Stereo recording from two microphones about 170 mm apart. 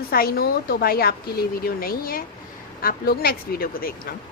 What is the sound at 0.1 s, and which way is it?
A woman's voice, 60° left (ahead or behind).